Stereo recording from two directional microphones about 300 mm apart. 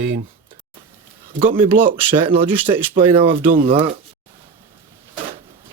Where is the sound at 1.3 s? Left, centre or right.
Right.